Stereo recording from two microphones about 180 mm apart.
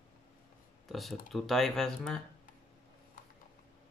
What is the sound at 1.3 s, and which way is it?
Speech, centre (ahead or behind).